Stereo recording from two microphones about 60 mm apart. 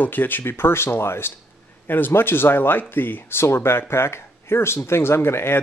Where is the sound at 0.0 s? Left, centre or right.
Left.